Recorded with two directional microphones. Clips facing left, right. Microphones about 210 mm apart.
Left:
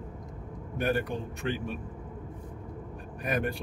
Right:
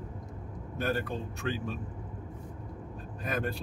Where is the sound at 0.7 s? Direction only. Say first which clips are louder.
Left 3 dB; 15° left (ahead or behind).